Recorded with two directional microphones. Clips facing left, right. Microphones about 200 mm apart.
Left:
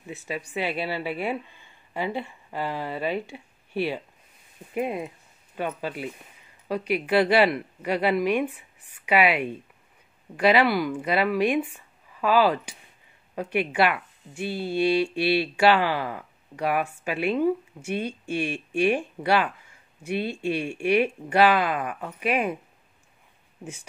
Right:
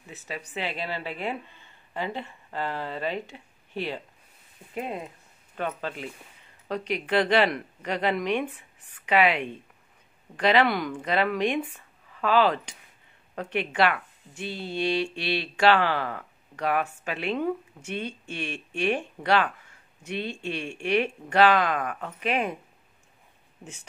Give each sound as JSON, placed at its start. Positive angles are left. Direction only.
{"t": 0.1, "sound": "speech", "side_deg": 10}
{"t": 23.6, "sound": "speech", "side_deg": 10}